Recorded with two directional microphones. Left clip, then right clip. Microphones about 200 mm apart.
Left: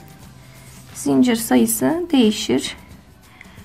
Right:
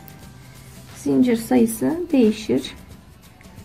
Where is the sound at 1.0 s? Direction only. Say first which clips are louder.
Left 2 dB; 25° left (ahead or behind).